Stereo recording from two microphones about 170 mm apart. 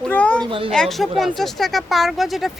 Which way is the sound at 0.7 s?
Centre (ahead or behind).